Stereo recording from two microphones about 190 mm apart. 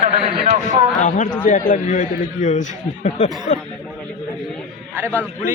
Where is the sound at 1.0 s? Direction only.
40° left (ahead or behind).